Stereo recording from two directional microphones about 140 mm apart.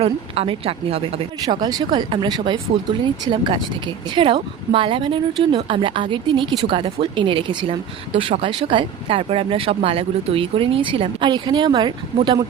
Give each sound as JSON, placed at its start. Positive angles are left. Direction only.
{"t": 0.0, "sound": "a woman's voice", "side_deg": -45}
{"t": 1.5, "sound": "speech", "side_deg": -30}